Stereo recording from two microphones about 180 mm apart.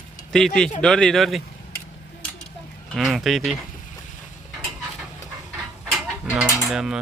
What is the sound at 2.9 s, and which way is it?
Speech, centre (ahead or behind).